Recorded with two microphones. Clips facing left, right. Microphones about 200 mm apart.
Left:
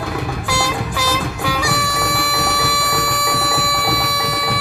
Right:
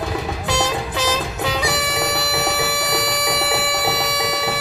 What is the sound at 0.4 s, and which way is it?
Music, 20° right (ahead or behind).